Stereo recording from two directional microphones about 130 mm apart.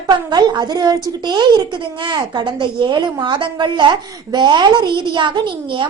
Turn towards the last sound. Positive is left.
turn(degrees=-35)  # may be behind; listen again after turning